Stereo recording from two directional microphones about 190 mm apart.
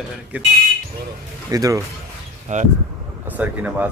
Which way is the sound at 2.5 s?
40° right (ahead or behind).